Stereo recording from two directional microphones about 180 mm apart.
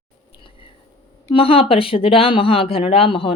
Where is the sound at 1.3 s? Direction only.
30° left (ahead or behind).